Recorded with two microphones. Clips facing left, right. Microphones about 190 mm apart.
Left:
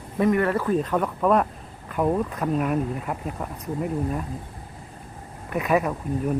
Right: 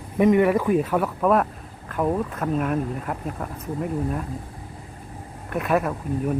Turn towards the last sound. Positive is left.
turn(degrees=0)  # may be behind; listen again after turning